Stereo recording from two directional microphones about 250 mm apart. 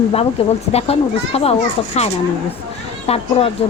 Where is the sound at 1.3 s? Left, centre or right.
Left.